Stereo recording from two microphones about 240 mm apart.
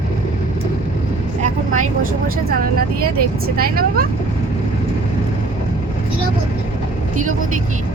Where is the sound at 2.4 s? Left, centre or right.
Right.